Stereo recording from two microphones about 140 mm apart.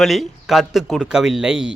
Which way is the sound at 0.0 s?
Centre (ahead or behind).